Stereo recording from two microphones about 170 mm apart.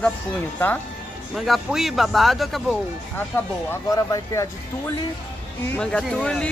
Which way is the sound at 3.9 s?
20° left (ahead or behind).